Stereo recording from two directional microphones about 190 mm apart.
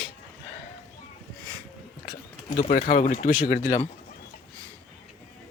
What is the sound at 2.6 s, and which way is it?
Speech, 50° left (ahead or behind).